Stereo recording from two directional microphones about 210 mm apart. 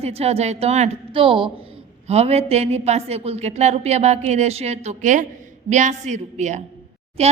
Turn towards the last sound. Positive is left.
turn(degrees=-30)  # may be behind; listen again after turning